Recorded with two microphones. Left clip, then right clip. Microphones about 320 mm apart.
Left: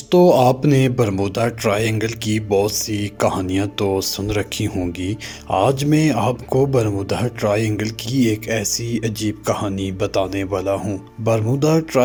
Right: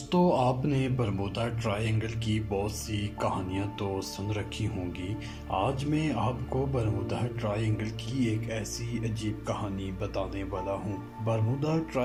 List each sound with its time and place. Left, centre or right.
0.1 s speech: left